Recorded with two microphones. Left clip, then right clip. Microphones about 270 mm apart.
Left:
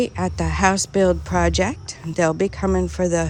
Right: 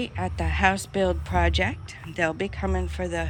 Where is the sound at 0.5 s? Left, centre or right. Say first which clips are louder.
Left 4 dB; left.